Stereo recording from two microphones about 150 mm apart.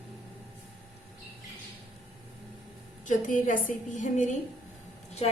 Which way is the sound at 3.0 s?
60° left (ahead or behind).